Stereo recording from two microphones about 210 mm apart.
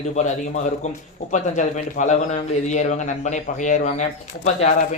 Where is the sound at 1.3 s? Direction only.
35° left (ahead or behind).